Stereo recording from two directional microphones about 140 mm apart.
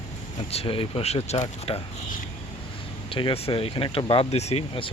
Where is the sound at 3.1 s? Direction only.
40° left (ahead or behind).